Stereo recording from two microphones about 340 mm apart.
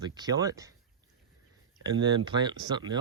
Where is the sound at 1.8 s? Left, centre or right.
Centre.